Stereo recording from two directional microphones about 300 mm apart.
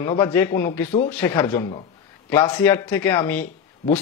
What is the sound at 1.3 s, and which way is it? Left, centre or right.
A man's voice, centre.